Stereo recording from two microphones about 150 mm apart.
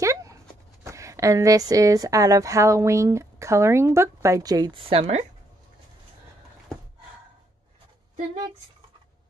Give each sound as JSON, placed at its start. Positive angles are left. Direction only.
{"t": 0.0, "sound": "dog", "side_deg": -20}
{"t": 0.8, "sound": "a woman's voice", "side_deg": -20}